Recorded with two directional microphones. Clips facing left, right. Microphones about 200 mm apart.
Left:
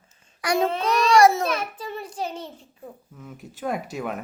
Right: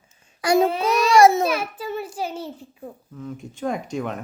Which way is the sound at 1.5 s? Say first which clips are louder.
Right 3 dB; 5° right (ahead or behind).